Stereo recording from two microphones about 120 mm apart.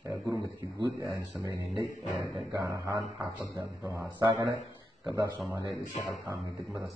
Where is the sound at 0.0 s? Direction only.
30° right (ahead or behind).